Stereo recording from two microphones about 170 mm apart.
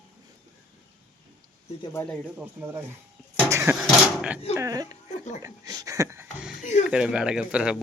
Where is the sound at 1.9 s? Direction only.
5° left (ahead or behind).